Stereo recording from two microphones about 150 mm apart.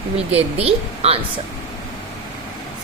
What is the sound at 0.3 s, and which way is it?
Speech, 40° right (ahead or behind).